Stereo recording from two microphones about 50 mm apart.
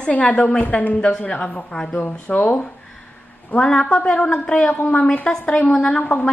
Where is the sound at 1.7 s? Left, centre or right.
Centre.